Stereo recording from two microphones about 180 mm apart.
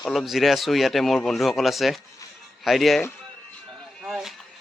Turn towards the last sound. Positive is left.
turn(degrees=0)  # may be behind; listen again after turning